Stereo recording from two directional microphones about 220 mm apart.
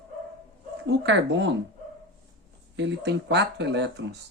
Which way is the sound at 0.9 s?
55° right (ahead or behind).